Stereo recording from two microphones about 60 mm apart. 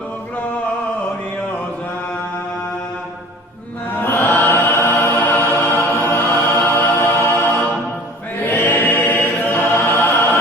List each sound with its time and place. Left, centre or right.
4.0 s chant: left
8.4 s choir: left